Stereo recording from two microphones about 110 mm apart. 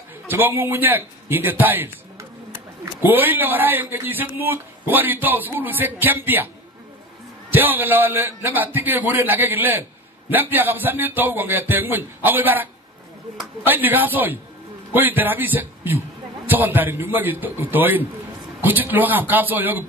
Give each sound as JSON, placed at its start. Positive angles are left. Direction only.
{"t": 0.3, "sound": "a man's voice", "side_deg": -20}
{"t": 7.5, "sound": "a man's voice", "side_deg": -15}
{"t": 13.7, "sound": "a man's voice", "side_deg": -15}